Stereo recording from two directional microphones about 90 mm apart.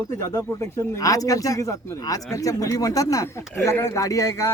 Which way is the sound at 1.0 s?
40° left (ahead or behind).